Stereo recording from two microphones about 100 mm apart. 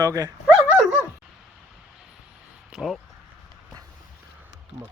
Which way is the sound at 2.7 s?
Centre (ahead or behind).